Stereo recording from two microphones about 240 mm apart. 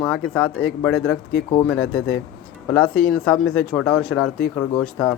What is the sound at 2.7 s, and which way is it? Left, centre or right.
Speech, centre.